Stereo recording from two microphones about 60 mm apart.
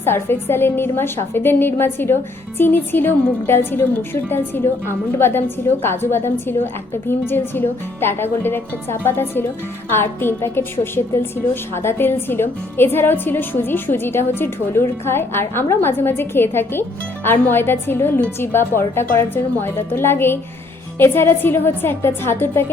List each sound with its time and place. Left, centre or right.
0.0 s a woman's voice: left